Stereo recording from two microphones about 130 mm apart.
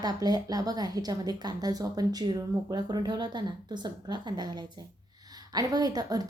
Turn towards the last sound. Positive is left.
turn(degrees=-30)  # may be behind; listen again after turning